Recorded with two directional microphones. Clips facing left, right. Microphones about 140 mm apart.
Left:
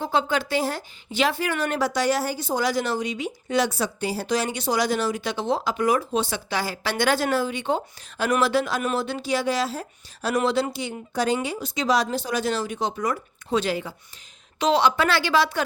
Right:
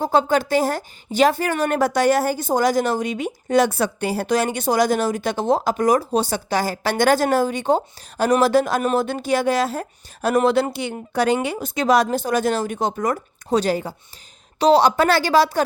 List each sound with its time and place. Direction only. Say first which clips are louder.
0.0 s a woman's voice: right 6 dB; 45° right (ahead or behind)